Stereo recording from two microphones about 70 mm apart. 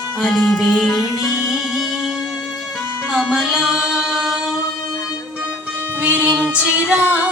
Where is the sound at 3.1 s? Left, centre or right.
Centre.